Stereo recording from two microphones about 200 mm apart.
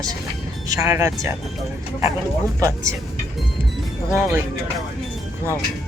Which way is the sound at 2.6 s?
15° right (ahead or behind).